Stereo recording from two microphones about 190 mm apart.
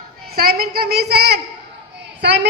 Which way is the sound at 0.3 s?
55° right (ahead or behind).